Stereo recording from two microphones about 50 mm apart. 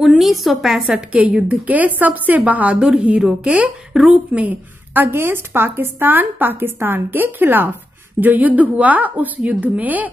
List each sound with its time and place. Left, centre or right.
0.0 s a woman's voice: centre
1.1 s a woman's voice: right